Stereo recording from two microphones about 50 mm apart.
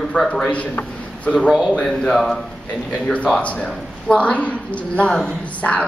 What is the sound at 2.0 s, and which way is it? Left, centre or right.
Speech, centre.